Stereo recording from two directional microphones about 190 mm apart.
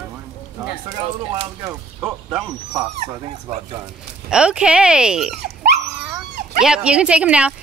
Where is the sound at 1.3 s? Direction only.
20° right (ahead or behind).